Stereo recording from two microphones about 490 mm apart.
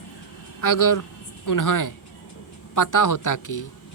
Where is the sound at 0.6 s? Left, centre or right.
Left.